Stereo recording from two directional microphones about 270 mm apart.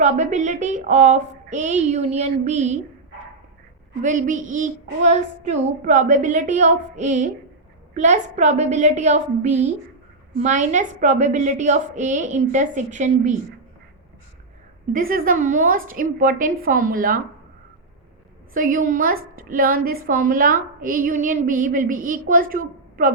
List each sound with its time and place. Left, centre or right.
0.0 s a woman's voice: right
4.0 s a woman's voice: right
14.9 s a woman's voice: right
18.5 s a woman's voice: right